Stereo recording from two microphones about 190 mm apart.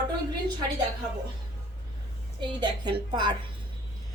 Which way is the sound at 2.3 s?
25° right (ahead or behind).